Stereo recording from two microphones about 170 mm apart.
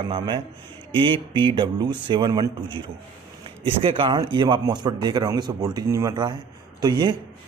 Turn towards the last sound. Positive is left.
turn(degrees=-25)  # may be behind; listen again after turning